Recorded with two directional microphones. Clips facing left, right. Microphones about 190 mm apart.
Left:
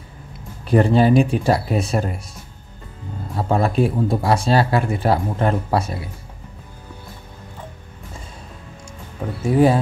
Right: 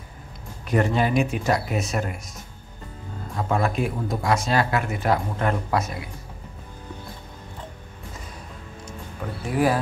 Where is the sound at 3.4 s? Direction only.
35° left (ahead or behind).